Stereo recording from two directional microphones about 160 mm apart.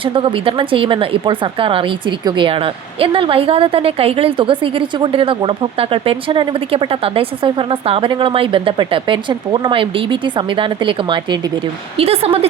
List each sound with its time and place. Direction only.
0.0 s speech: 35° right (ahead or behind)